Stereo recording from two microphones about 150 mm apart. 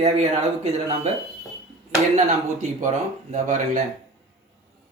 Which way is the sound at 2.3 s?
50° right (ahead or behind).